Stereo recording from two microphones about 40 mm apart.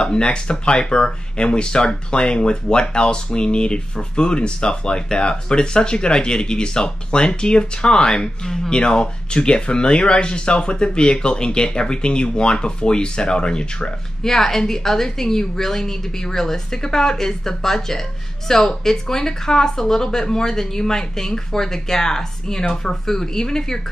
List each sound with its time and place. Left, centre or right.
0.0 s speech: left